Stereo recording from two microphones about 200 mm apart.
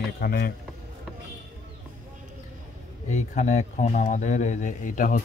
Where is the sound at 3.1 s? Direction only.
35° left (ahead or behind).